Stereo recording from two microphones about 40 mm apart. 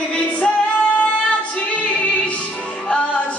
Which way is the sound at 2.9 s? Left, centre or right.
Left.